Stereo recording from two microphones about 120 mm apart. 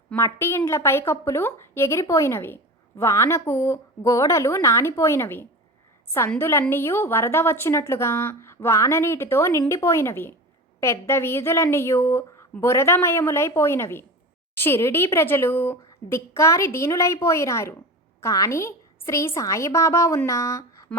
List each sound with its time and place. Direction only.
0.2 s a woman's voice: 25° left (ahead or behind)